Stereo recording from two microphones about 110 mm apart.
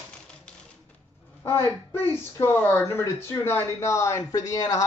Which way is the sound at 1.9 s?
20° left (ahead or behind).